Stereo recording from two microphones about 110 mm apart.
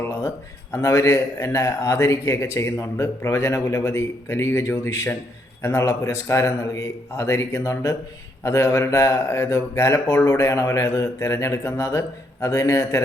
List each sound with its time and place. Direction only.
0.0 s a man's voice: 25° left (ahead or behind)